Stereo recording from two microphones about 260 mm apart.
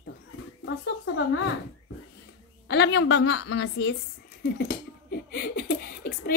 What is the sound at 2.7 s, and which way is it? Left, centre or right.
Speech, left.